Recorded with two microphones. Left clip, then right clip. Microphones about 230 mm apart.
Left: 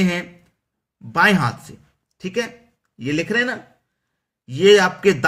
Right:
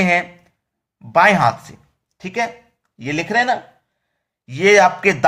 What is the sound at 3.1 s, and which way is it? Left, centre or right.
A man's voice, centre.